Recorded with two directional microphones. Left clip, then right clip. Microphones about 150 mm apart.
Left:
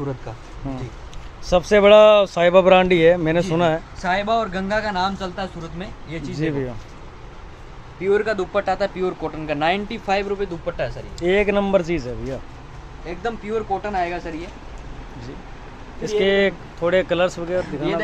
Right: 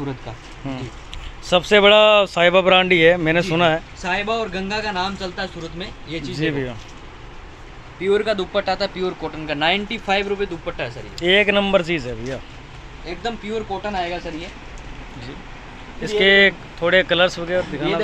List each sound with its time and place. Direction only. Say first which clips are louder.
1.5 s speech: even; 5° left (ahead or behind)
4.0 s speech: left 5 dB; 10° right (ahead or behind)
4.5 s speech: left 2 dB; 40° right (ahead or behind)
4.8 s speech: left 1 dB; 10° right (ahead or behind)
8.0 s speech: right 1 dB; 15° right (ahead or behind)
8.5 s speech: even; centre (ahead or behind)
8.7 s speech: left 1 dB; 10° left (ahead or behind); by 11.0 s 10° right (ahead or behind)
11.1 s speech: right 3 dB; 5° left (ahead or behind)
13.0 s speech: even; 5° right (ahead or behind)
16.2 s speech: right 5 dB; centre (ahead or behind)